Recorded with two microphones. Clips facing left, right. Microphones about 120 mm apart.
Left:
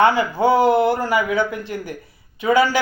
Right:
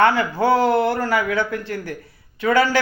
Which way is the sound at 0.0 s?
15° left (ahead or behind).